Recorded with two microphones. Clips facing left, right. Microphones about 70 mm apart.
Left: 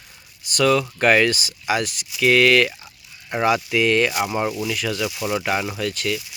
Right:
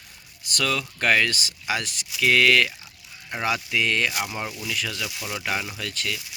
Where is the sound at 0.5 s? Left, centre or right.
Left.